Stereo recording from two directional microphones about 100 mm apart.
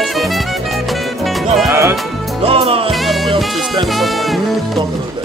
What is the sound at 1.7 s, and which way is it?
Music, 25° right (ahead or behind).